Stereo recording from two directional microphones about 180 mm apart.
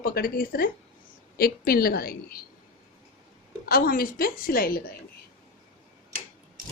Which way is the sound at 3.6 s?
55° left (ahead or behind).